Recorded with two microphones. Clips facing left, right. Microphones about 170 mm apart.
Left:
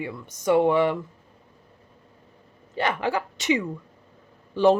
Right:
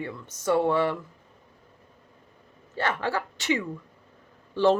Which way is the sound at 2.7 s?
15° left (ahead or behind).